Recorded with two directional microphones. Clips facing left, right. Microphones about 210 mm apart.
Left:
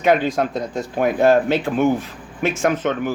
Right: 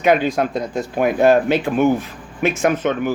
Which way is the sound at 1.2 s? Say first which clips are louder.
Right 1 dB; 15° right (ahead or behind).